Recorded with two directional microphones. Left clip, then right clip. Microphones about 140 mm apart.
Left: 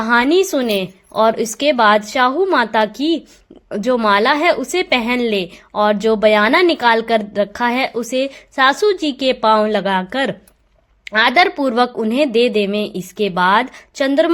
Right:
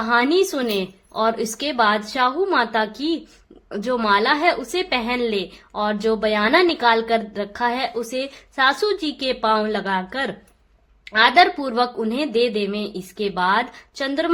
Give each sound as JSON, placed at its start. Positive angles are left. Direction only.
{"t": 0.0, "sound": "a woman's voice", "side_deg": 40}